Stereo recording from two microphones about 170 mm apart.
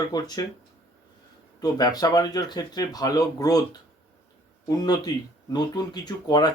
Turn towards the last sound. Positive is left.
turn(degrees=25)  # may be behind; listen again after turning